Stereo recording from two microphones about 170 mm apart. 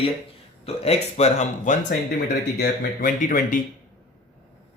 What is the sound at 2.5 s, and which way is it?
Speech, 55° left (ahead or behind).